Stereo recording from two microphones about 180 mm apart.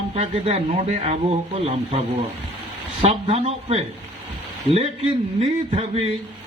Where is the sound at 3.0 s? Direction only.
35° right (ahead or behind).